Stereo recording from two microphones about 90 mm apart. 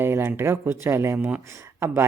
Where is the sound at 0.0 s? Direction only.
25° right (ahead or behind).